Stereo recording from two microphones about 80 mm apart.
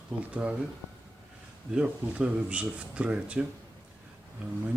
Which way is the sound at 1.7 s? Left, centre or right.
Centre.